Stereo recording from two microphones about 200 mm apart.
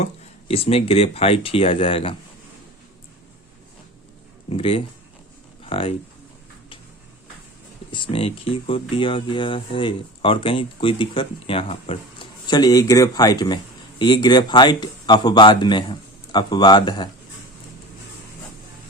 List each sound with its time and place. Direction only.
0.0 s speech: 30° left (ahead or behind)
4.4 s speech: 25° left (ahead or behind)
7.9 s speech: 25° left (ahead or behind)